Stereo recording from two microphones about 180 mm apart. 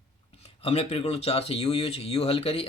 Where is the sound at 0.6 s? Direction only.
35° left (ahead or behind).